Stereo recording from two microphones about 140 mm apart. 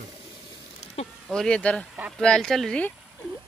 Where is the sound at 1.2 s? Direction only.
5° left (ahead or behind).